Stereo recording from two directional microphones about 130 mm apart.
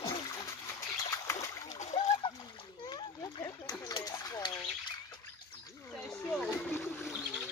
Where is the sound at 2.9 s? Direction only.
30° left (ahead or behind).